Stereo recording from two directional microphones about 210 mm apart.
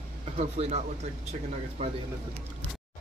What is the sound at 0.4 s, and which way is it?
Speech, 30° right (ahead or behind).